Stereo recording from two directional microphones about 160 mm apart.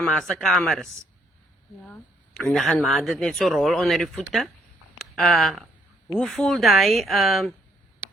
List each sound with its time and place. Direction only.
0.0 s speech: 5° left (ahead or behind)
1.9 s speech: 5° left (ahead or behind)